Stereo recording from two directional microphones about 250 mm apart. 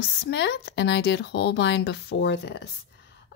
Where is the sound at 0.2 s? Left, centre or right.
Left.